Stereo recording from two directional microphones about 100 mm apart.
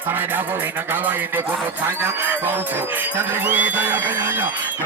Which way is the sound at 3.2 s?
20° right (ahead or behind).